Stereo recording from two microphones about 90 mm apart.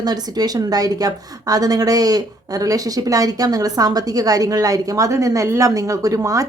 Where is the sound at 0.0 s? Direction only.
45° right (ahead or behind).